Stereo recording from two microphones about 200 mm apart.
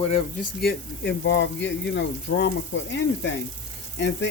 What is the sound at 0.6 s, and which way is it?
Speech, 55° left (ahead or behind).